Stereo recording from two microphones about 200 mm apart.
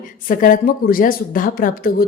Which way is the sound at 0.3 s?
45° left (ahead or behind).